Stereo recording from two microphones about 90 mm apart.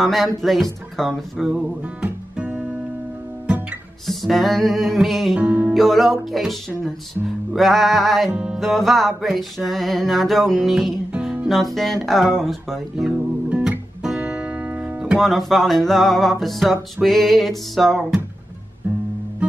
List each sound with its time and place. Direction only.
0.0 s music: centre (ahead or behind)
2.3 s music: 10° right (ahead or behind)
4.1 s music: centre (ahead or behind)
5.4 s music: 15° right (ahead or behind)
5.8 s music: centre (ahead or behind)
6.7 s music: 25° right (ahead or behind)
7.5 s music: centre (ahead or behind)
12.9 s guitar: 10° right (ahead or behind)
15.1 s music: centre (ahead or behind)